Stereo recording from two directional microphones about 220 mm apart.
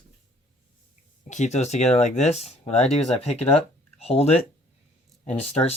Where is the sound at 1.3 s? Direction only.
30° left (ahead or behind).